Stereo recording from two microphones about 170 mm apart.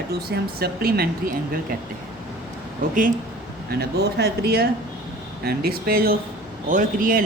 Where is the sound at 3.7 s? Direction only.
70° right (ahead or behind).